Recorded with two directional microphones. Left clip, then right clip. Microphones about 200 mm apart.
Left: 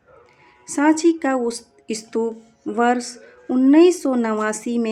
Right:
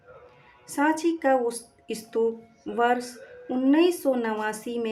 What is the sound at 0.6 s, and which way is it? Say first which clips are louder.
Speech: left 7 dB; 30° left (ahead or behind).